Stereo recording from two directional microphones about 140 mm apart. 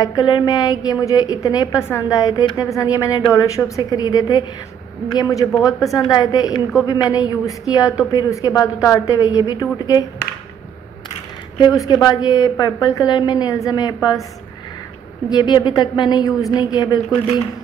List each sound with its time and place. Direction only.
0.0 s a woman's voice: 30° left (ahead or behind)
11.5 s a woman's voice: 30° left (ahead or behind)
15.2 s a woman's voice: 30° left (ahead or behind)